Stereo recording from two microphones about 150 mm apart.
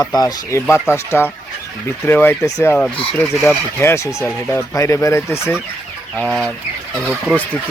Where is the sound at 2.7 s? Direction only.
5° left (ahead or behind).